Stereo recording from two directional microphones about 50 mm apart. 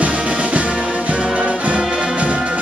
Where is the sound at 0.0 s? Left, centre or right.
Right.